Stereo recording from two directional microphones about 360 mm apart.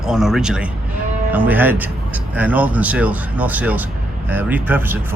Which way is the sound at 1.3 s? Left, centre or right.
Centre.